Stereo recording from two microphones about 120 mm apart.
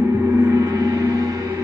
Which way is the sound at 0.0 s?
25° right (ahead or behind).